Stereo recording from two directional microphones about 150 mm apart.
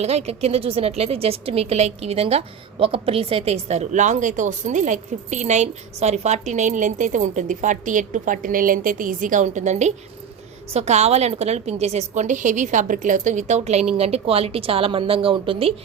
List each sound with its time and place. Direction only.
0.0 s a woman's voice: 45° right (ahead or behind)